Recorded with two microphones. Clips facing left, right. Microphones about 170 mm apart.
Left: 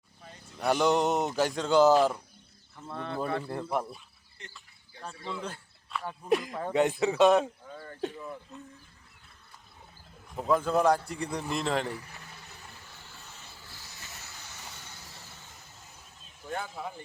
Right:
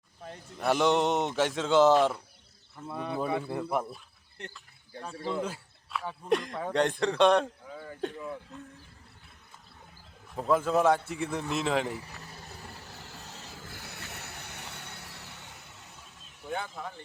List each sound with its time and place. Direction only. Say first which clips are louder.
0.6 s speech: even; centre (ahead or behind)
4.5 s cricket: right 7 dB; centre (ahead or behind)
5.4 s speech: right 5 dB; 5° right (ahead or behind)
10.3 s speech: even; centre (ahead or behind)
12.0 s vehicle: right 3 dB; 40° right (ahead or behind)
13.6 s a sound: right 6 dB; 55° right (ahead or behind)
16.5 s speech: even; 5° left (ahead or behind)